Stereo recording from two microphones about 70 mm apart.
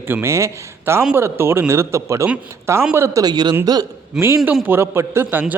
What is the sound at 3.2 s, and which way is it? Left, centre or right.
Speech, right.